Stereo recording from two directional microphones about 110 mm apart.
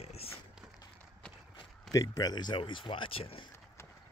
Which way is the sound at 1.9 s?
30° left (ahead or behind).